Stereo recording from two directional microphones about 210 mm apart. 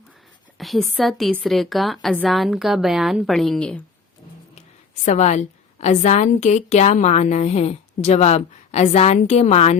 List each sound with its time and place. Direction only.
0.6 s a woman's voice: centre (ahead or behind)
5.0 s a woman's voice: 35° left (ahead or behind)